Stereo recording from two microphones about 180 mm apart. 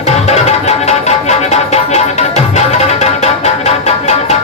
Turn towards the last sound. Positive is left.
turn(degrees=35)  # may be behind; listen again after turning